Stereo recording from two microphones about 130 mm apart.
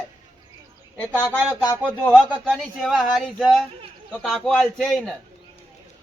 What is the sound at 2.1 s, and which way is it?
Speech, 5° right (ahead or behind).